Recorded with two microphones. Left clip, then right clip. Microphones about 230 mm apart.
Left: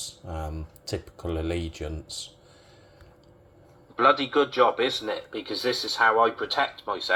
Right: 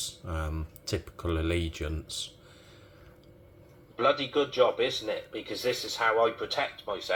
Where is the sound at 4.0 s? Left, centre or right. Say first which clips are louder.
Left 6 dB; left.